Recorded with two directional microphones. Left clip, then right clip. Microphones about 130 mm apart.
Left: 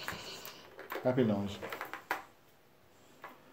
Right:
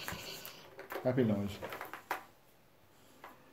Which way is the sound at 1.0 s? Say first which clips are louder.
Left 2 dB; 10° left (ahead or behind).